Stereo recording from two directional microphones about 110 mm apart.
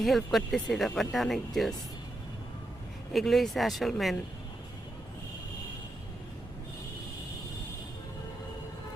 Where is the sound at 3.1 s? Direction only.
Centre (ahead or behind).